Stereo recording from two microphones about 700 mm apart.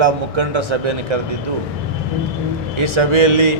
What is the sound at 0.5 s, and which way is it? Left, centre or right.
Speech, right.